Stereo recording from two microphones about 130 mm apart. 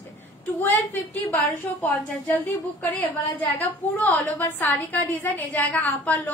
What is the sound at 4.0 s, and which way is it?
A woman's voice, 15° left (ahead or behind).